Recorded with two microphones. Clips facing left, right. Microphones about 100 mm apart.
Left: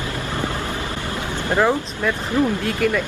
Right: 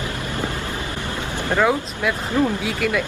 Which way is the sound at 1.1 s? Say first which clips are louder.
Left 1 dB; 25° right (ahead or behind).